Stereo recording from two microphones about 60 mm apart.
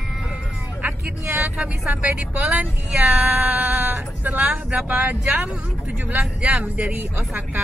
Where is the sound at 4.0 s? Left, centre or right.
Right.